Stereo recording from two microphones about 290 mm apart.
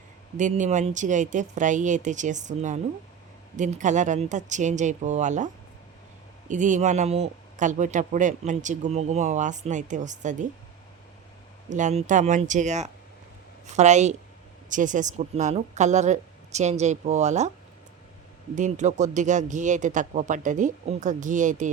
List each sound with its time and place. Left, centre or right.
0.3 s speech: right
6.5 s speech: right
11.7 s speech: right
18.5 s speech: right